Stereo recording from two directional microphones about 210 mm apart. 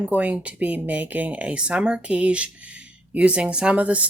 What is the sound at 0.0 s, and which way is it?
A woman's voice, 5° right (ahead or behind).